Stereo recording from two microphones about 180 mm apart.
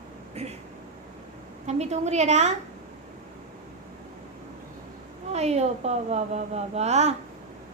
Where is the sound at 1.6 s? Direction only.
40° right (ahead or behind).